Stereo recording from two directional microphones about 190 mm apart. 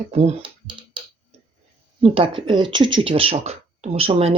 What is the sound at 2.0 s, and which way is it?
Speech, 30° right (ahead or behind).